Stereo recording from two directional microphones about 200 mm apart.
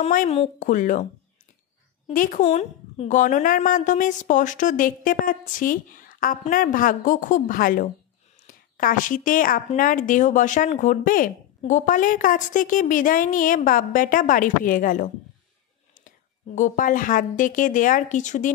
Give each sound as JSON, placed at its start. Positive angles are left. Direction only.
{"t": 0.0, "sound": "a woman's voice", "side_deg": 35}
{"t": 2.0, "sound": "a woman's voice", "side_deg": 40}
{"t": 16.5, "sound": "a woman's voice", "side_deg": 40}